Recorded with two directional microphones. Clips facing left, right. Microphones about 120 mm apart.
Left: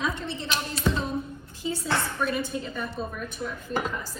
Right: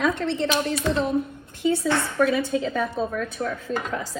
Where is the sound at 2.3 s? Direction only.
85° right.